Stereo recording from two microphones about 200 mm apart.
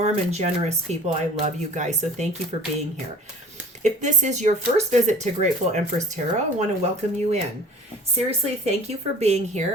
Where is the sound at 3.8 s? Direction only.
35° right (ahead or behind).